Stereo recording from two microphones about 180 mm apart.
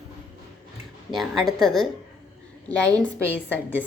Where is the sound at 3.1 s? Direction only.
10° right (ahead or behind).